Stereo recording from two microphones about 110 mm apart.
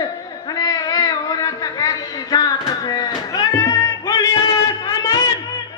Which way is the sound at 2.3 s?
35° left (ahead or behind).